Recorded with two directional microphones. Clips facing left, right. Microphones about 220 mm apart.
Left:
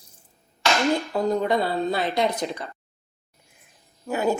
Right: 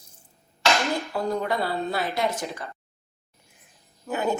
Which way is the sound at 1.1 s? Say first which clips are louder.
Left 4 dB; 20° left (ahead or behind).